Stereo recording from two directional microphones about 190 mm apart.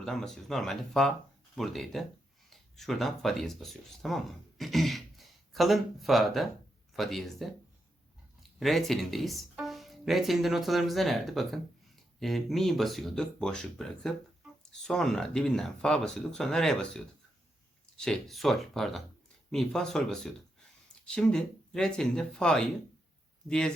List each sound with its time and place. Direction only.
0.0 s speech: centre (ahead or behind)
8.5 s speech: centre (ahead or behind)